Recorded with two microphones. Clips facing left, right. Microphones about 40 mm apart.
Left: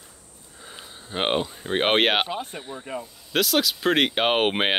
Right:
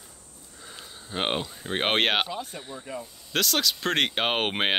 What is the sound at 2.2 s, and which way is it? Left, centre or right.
Speech, left.